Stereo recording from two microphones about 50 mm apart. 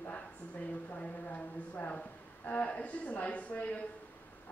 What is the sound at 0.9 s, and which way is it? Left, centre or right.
A woman's voice, left.